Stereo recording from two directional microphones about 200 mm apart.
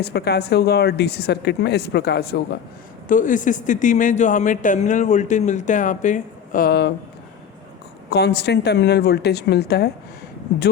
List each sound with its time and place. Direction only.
0.0 s a woman's voice: 55° left (ahead or behind)
3.1 s speech: 40° left (ahead or behind)
8.1 s a woman's voice: 55° left (ahead or behind)